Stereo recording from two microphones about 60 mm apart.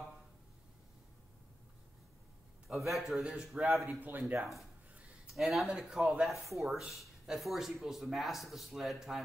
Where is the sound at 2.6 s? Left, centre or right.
Centre.